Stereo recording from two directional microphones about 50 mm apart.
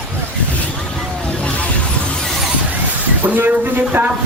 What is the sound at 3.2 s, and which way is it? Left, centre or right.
Speech, right.